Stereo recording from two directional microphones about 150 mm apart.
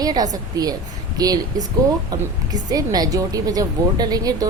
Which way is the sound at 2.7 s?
25° right (ahead or behind).